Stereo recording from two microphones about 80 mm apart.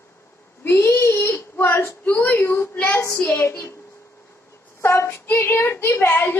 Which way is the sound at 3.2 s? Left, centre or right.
Left.